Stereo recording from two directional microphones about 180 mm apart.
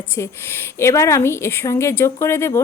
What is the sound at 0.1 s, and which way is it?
A woman's voice, 15° left (ahead or behind).